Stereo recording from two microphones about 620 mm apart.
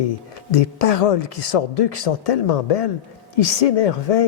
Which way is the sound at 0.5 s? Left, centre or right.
Left.